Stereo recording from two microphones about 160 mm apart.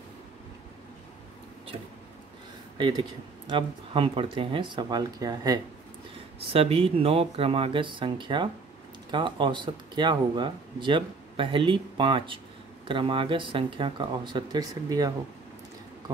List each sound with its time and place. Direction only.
2.8 s speech: 30° right (ahead or behind)
6.5 s speech: 35° right (ahead or behind)